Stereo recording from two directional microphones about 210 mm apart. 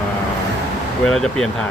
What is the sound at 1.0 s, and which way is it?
Speech, 5° left (ahead or behind).